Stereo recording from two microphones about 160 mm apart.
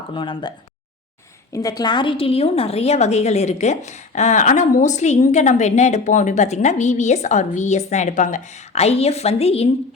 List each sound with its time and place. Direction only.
0.1 s speech: 30° left (ahead or behind)
1.5 s a woman's voice: 25° left (ahead or behind); by 9.6 s 40° left (ahead or behind)